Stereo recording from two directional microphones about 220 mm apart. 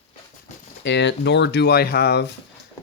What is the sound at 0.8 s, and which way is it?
Speech, 50° left (ahead or behind).